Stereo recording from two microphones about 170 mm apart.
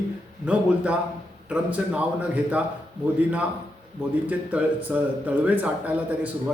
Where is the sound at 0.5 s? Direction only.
5° right (ahead or behind).